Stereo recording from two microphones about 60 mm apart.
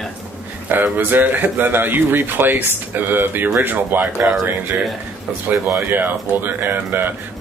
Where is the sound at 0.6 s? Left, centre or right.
Right.